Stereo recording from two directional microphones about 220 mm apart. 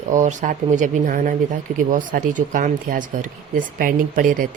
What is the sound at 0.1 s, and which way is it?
A woman's voice, 35° right (ahead or behind).